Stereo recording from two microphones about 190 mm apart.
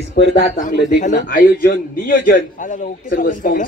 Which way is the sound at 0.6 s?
45° left (ahead or behind).